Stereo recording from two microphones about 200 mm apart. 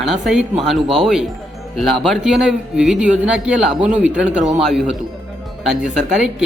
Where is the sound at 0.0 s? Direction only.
Centre (ahead or behind).